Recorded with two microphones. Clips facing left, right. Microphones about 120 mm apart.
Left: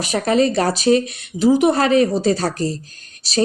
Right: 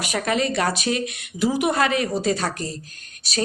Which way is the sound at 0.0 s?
35° left (ahead or behind).